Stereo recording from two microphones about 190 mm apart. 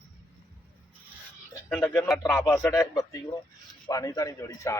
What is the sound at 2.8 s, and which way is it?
A man's voice, 20° left (ahead or behind).